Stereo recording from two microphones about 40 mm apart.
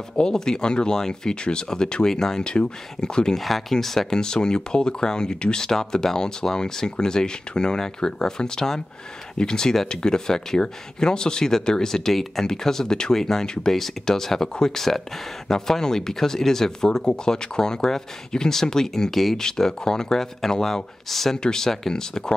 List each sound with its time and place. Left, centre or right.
0.2 s speech: centre
3.3 s speech: centre
4.1 s speech: centre